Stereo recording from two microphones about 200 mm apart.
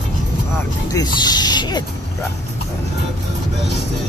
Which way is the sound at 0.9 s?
20° left (ahead or behind).